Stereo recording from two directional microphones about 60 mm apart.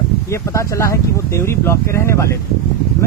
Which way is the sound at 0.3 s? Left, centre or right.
Left.